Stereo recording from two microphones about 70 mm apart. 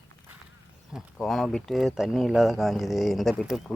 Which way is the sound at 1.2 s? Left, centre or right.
Centre.